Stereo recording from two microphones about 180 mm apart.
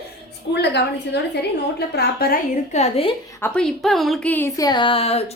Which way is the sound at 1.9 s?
55° left (ahead or behind).